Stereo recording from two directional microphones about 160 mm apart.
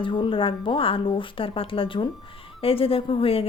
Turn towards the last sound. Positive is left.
turn(degrees=35)  # may be behind; listen again after turning